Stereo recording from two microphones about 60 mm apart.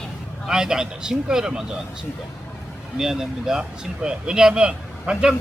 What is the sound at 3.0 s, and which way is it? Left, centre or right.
Speech, centre.